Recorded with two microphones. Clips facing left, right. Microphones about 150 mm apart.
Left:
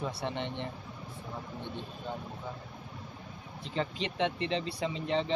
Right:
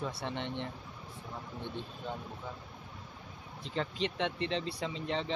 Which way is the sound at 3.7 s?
15° left (ahead or behind).